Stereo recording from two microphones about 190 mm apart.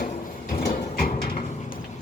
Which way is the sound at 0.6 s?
50° left (ahead or behind).